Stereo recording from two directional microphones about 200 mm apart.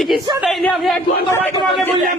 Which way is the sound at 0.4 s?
Centre (ahead or behind).